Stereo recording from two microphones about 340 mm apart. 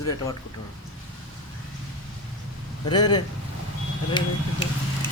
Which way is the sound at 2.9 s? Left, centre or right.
Centre.